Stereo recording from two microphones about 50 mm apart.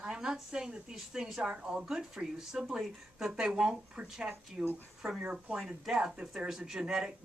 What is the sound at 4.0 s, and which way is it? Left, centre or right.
Speech, right.